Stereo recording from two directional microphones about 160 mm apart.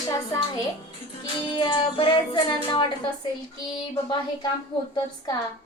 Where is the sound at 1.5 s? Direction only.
30° left (ahead or behind).